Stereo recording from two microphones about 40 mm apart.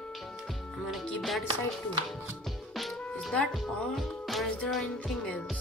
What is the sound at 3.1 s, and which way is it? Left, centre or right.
Music, left.